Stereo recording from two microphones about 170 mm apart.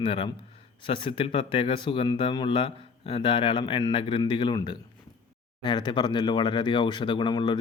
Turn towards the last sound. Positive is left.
turn(degrees=25)  # may be behind; listen again after turning